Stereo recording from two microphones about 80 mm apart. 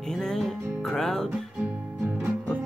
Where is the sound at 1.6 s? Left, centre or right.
Right.